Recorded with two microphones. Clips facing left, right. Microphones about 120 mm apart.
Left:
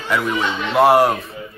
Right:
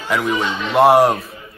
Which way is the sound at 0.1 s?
Centre (ahead or behind).